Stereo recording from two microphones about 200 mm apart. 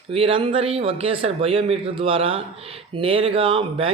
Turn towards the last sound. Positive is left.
turn(degrees=-25)  # may be behind; listen again after turning